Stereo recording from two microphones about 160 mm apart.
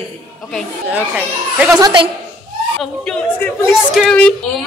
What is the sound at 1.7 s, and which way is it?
Speech, 30° right (ahead or behind).